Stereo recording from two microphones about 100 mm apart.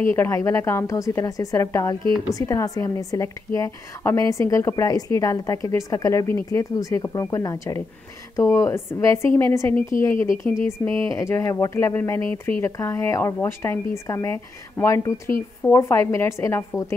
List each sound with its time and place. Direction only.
0.0 s a woman's voice: 25° left (ahead or behind)